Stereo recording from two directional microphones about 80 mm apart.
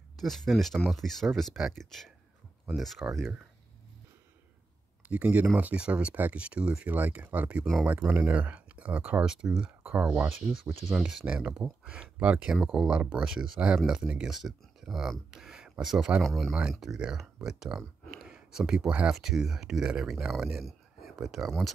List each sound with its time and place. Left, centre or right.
0.2 s speech: centre
5.0 s speech: centre
10.6 s speech: centre